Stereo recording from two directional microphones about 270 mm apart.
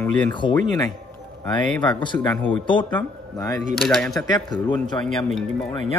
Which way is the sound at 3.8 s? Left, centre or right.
Centre.